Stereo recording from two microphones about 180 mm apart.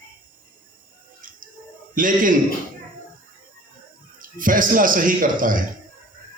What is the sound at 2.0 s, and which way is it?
Speech, 50° right (ahead or behind).